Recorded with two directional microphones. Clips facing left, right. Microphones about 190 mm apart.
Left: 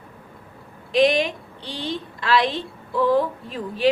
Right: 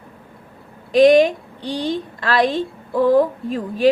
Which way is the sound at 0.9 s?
45° right (ahead or behind).